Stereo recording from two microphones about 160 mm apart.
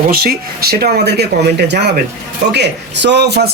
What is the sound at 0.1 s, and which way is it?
Speech, 70° right (ahead or behind).